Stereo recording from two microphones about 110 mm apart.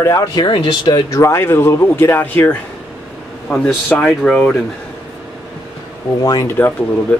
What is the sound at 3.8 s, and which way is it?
Speech, 10° left (ahead or behind).